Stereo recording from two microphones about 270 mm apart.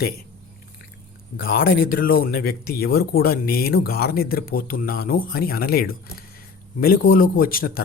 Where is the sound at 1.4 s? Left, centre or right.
Left.